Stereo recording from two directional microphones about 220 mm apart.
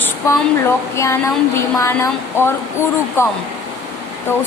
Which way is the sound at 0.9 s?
10° left (ahead or behind).